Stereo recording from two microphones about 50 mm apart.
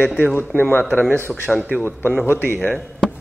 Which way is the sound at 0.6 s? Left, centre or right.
Left.